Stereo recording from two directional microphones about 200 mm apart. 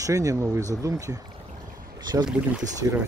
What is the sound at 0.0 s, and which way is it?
Speech, 15° right (ahead or behind).